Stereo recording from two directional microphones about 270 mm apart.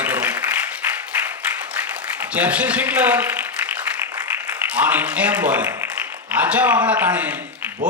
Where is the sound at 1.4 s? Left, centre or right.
Centre.